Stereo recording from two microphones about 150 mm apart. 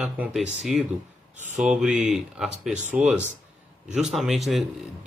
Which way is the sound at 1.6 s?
5° right (ahead or behind).